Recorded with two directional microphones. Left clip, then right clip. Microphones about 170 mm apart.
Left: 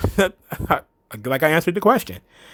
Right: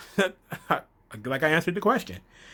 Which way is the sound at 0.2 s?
40° left (ahead or behind).